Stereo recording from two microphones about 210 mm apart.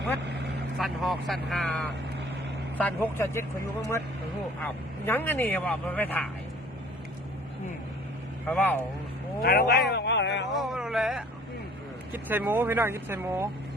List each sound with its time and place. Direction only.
0.8 s speech: centre (ahead or behind)
8.4 s speech: 10° left (ahead or behind)
9.4 s speech: 45° left (ahead or behind)
9.9 s a sound: 55° left (ahead or behind)
10.5 s a sound: centre (ahead or behind)
12.1 s speech: 10° right (ahead or behind)